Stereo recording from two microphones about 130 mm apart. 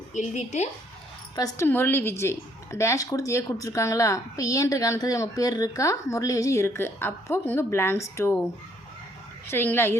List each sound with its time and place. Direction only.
0.1 s a woman's voice: 65° left (ahead or behind)
1.4 s a woman's voice: 20° left (ahead or behind)
9.5 s speech: 15° left (ahead or behind)